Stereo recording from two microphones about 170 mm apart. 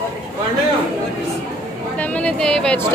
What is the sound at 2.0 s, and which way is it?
Speech, 5° left (ahead or behind).